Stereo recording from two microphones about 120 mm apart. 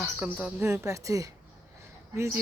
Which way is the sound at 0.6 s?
20° right (ahead or behind).